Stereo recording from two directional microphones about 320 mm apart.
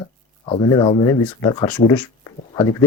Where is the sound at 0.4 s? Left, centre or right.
Centre.